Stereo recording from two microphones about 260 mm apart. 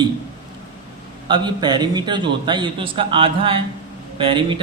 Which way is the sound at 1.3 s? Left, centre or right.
Centre.